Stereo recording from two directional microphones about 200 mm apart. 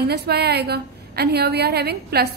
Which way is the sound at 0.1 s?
55° right (ahead or behind).